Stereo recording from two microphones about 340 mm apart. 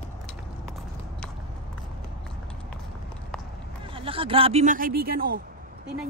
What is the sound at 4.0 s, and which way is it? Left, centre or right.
Speech, centre.